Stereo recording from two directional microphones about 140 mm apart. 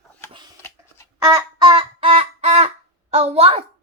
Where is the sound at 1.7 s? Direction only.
50° right (ahead or behind).